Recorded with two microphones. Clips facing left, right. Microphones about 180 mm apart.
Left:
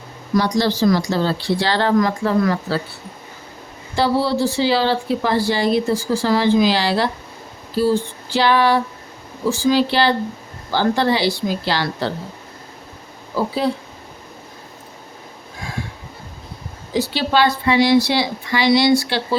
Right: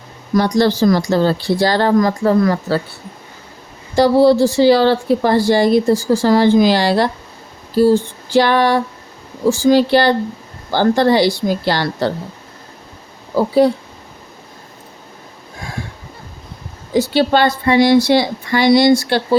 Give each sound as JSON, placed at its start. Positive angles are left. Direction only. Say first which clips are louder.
{"t": 0.3, "sound": "a woman's voice", "louder": "right 4 dB", "side_deg": -50}
{"t": 3.9, "sound": "a woman's voice", "louder": "right 8 dB", "side_deg": -45}
{"t": 8.3, "sound": "a woman's voice", "louder": "right 3 dB", "side_deg": -45}
{"t": 16.9, "sound": "a woman's voice", "louder": "right 5 dB", "side_deg": -50}